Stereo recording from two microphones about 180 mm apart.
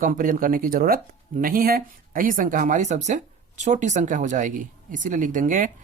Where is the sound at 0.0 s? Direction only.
50° right (ahead or behind).